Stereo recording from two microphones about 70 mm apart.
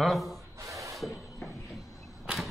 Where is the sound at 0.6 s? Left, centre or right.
Right.